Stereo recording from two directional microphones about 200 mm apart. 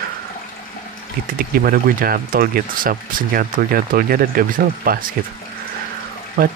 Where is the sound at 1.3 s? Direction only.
45° right (ahead or behind).